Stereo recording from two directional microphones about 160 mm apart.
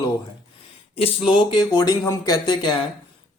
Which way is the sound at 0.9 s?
35° left (ahead or behind).